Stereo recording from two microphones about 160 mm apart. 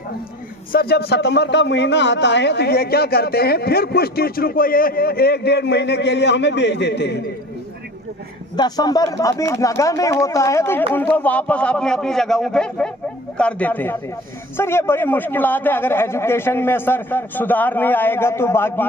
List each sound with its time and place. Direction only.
0.7 s a man's voice: 75° left (ahead or behind); by 7.2 s 90° left
8.5 s a man's voice: 25° left (ahead or behind)